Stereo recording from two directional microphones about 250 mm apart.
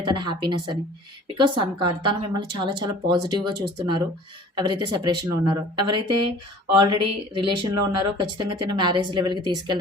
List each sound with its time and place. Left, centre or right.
0.0 s speech: centre
6.1 s speech: right
6.7 s speech: centre